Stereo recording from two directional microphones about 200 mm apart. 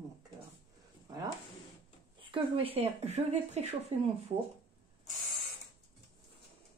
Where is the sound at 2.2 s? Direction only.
25° right (ahead or behind).